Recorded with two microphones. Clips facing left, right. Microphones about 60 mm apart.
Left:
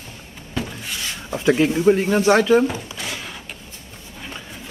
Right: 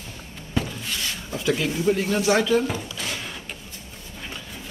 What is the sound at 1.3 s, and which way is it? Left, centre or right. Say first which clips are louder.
Speech: left 7 dB; left.